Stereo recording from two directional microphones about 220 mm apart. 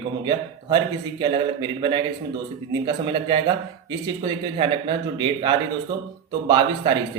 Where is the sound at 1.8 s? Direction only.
20° right (ahead or behind).